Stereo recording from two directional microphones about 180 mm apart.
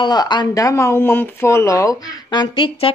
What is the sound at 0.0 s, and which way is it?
Speech, 25° left (ahead or behind).